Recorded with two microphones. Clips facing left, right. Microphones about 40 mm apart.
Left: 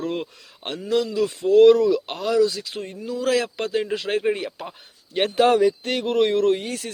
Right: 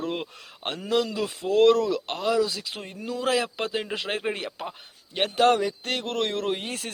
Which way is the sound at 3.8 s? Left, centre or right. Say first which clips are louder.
Left 5 dB; right.